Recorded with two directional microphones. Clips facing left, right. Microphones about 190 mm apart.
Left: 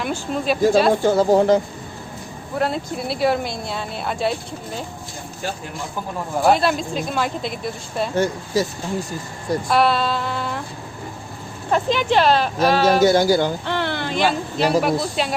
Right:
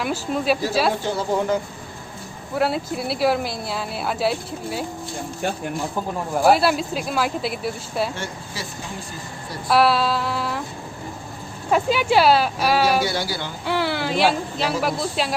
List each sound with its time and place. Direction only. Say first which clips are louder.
0.0 s speech: even; 5° right (ahead or behind)
1.0 s speech: left 7 dB; 40° left (ahead or behind)
2.6 s speech: right 1 dB; 5° right (ahead or behind)
6.4 s speech: even; 5° right (ahead or behind)
8.1 s speech: left 12 dB; 40° left (ahead or behind)
9.6 s speech: right 2 dB; 5° right (ahead or behind)
11.7 s speech: even; 10° right (ahead or behind)
13.0 s speech: left 10 dB; 45° left (ahead or behind)
13.7 s speech: right 1 dB; 5° right (ahead or behind)